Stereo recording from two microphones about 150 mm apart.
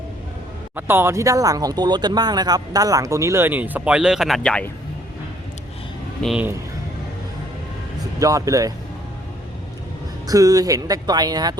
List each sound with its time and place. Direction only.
0.8 s speech: 15° right (ahead or behind); by 4.7 s 5° left (ahead or behind)
6.2 s speech: 5° left (ahead or behind)
8.2 s speech: 25° right (ahead or behind)
10.2 s speech: 25° right (ahead or behind)